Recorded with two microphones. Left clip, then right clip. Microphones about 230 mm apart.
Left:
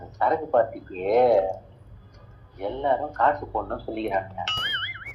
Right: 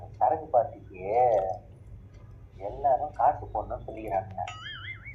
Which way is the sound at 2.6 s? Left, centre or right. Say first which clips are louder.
Left 2 dB; left.